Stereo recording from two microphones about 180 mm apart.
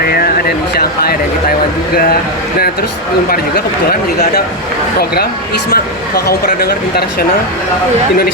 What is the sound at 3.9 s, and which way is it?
Speech, 65° left (ahead or behind).